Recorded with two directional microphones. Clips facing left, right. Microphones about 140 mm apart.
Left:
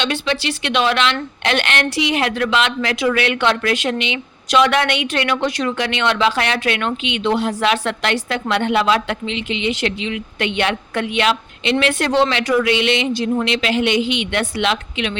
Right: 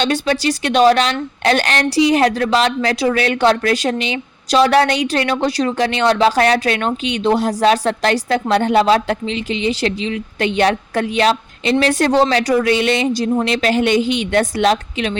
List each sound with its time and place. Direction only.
0.0 s a woman's voice: 40° right (ahead or behind)